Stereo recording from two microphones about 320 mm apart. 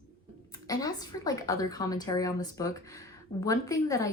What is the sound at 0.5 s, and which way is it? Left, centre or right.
A woman's voice, centre.